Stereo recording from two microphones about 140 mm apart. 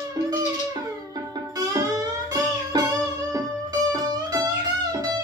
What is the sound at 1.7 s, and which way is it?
Music, 25° right (ahead or behind).